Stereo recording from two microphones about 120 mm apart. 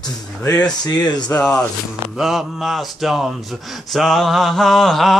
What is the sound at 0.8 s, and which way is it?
Speech, 35° left (ahead or behind).